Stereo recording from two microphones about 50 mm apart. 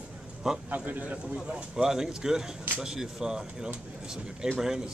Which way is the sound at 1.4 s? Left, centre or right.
Centre.